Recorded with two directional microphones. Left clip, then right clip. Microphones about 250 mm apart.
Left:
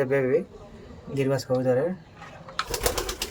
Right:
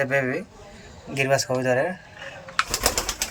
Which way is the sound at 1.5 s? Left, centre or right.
Right.